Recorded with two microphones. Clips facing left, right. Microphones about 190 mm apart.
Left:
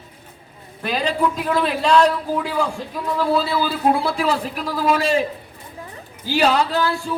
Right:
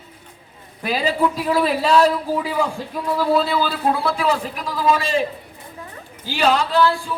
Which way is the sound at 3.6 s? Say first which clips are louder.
Left 1 dB; 10° left (ahead or behind).